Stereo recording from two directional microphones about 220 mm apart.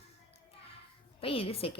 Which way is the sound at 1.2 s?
25° left (ahead or behind).